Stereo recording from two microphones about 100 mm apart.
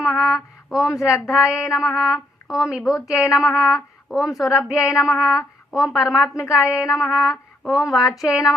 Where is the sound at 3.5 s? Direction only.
35° left (ahead or behind).